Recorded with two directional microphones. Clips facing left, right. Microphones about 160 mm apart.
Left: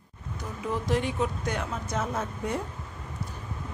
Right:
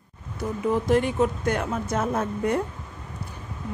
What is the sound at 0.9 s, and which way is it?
A woman's voice, 50° right (ahead or behind).